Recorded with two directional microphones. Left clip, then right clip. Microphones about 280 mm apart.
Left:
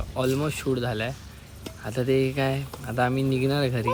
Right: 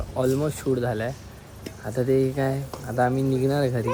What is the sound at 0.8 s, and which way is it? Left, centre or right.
Speech, centre.